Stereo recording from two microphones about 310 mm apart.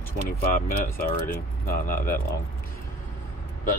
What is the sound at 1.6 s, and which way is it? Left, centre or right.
Speech, left.